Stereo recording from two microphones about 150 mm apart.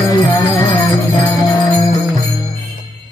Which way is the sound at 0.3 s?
25° left (ahead or behind).